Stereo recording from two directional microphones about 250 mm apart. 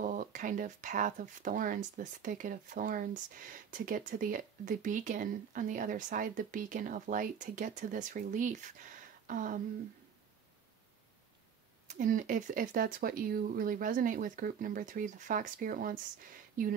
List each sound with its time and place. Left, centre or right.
0.0 s speech: right
11.9 s speech: right